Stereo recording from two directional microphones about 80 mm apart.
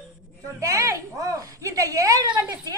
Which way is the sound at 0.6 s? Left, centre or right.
Right.